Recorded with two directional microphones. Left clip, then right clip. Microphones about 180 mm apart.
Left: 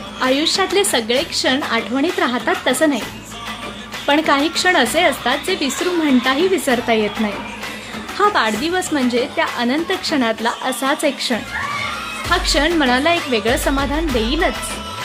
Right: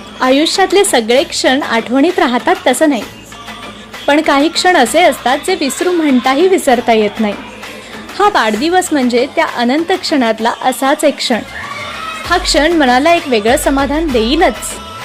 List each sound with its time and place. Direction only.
0.2 s a woman's voice: 30° right (ahead or behind)
4.0 s a woman's voice: 30° right (ahead or behind)
8.2 s a woman's voice: 30° right (ahead or behind)